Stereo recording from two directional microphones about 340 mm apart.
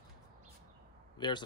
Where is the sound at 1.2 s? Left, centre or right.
Centre.